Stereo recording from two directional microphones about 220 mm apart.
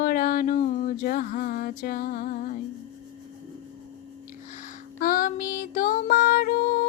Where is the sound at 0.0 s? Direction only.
40° left (ahead or behind).